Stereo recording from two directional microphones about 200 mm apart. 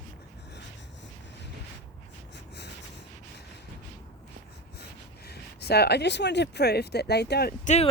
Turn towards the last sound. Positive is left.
turn(degrees=35)  # may be behind; listen again after turning